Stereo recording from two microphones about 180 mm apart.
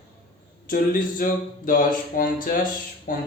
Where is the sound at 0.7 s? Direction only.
50° left (ahead or behind).